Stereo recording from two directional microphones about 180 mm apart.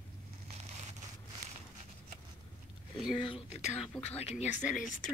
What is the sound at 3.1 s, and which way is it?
Speech, 30° left (ahead or behind).